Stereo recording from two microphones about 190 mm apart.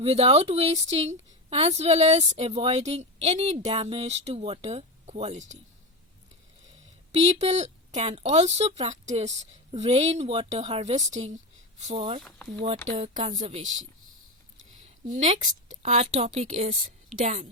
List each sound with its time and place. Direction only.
0.0 s a woman's voice: 30° right (ahead or behind)
7.1 s a woman's voice: 35° right (ahead or behind)
12.9 s a woman's voice: 35° right (ahead or behind)
15.0 s a woman's voice: 40° right (ahead or behind)